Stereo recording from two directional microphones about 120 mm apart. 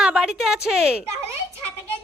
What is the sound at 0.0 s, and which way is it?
A woman's voice, 5° right (ahead or behind).